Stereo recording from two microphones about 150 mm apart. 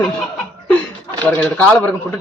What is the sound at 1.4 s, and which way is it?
Speech, 10° left (ahead or behind).